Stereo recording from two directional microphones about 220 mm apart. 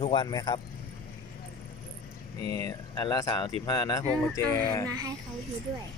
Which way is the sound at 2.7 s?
20° left (ahead or behind).